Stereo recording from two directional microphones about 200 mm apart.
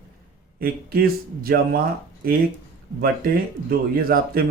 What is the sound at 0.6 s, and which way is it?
Speech, 50° right (ahead or behind).